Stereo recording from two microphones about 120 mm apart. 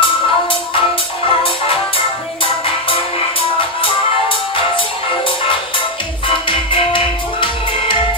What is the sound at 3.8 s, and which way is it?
Music, 45° left (ahead or behind).